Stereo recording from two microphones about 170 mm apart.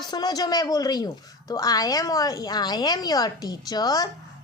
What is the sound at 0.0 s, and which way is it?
A woman's voice, 25° left (ahead or behind).